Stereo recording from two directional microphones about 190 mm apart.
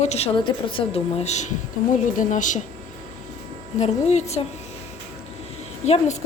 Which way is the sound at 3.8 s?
35° left (ahead or behind).